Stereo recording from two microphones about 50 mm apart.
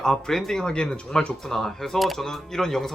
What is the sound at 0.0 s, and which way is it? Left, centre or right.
Speech, centre.